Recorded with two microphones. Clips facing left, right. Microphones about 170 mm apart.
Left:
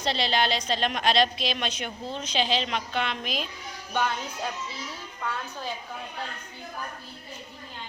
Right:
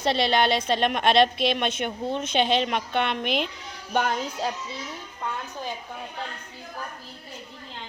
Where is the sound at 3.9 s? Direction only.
45° right (ahead or behind).